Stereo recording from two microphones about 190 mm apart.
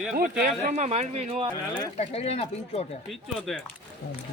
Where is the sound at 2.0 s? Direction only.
30° left (ahead or behind).